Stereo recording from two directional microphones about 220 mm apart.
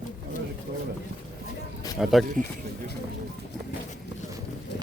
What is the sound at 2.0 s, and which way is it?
Speech, centre (ahead or behind).